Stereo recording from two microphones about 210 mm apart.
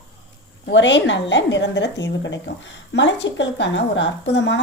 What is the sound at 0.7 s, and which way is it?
A woman's voice, 60° left (ahead or behind).